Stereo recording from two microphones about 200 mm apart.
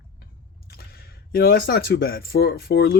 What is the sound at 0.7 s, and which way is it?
Speech, 50° left (ahead or behind).